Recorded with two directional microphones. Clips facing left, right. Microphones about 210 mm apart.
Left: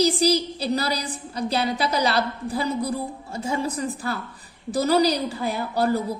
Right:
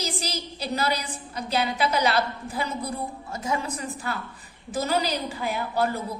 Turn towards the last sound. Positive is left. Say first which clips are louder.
# left 3 dB
turn(degrees=40)  # may be behind; listen again after turning